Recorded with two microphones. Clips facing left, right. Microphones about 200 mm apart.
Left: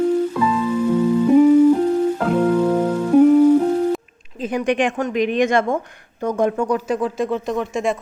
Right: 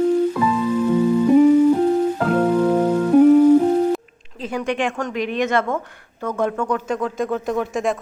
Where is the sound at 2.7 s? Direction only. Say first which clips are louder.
Right 1 dB; 10° right (ahead or behind).